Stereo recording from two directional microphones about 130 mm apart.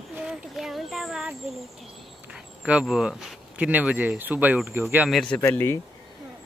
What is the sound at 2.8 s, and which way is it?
Speech, centre (ahead or behind).